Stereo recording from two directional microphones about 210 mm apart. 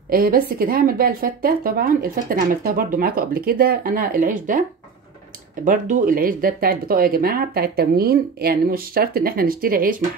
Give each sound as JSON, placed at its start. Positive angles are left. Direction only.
{"t": 0.1, "sound": "a woman's voice", "side_deg": -45}
{"t": 5.7, "sound": "a woman's voice", "side_deg": -40}